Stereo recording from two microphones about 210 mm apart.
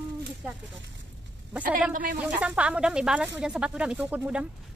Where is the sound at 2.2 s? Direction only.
5° right (ahead or behind).